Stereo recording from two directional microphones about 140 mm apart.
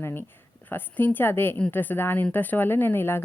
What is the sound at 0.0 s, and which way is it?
A woman's voice, 15° left (ahead or behind).